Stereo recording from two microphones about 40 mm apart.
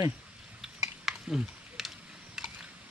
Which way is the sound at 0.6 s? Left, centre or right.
Centre.